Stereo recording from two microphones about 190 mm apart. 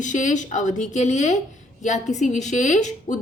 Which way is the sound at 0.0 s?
40° left (ahead or behind).